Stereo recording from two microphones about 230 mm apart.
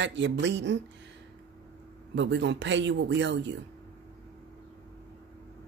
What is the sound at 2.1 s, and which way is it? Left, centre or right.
Speech, right.